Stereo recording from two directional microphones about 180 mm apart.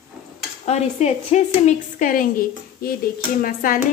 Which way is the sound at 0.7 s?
40° left (ahead or behind).